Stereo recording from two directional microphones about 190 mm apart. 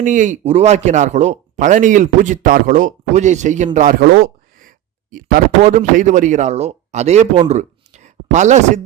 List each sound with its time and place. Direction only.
0.0 s speech: 40° right (ahead or behind)
4.0 s a sound: 55° right (ahead or behind)
5.1 s speech: 45° right (ahead or behind)